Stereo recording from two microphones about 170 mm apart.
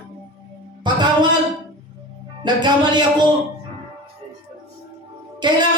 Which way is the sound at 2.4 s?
25° right (ahead or behind).